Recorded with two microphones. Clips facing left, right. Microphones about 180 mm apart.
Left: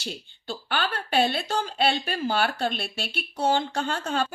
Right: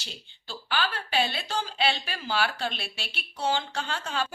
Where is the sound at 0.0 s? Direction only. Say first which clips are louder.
Left 10 dB; 55° left (ahead or behind).